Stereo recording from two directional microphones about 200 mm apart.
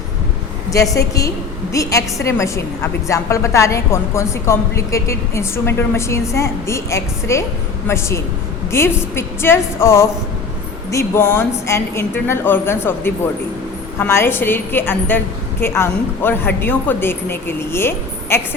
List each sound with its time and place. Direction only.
0.7 s a woman's voice: 15° left (ahead or behind)